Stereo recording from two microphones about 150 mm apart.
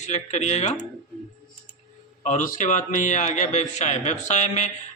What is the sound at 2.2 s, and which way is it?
A man's voice, 55° left (ahead or behind).